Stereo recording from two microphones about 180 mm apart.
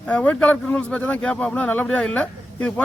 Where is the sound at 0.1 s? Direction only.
5° left (ahead or behind).